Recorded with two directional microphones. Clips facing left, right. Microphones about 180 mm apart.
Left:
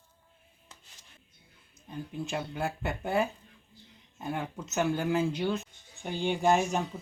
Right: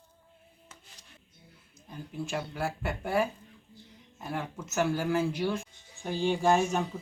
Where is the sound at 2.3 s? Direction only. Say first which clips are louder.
Right 1 dB; 20° left (ahead or behind).